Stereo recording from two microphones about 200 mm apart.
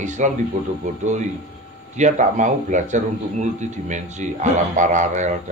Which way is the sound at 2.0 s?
35° right (ahead or behind).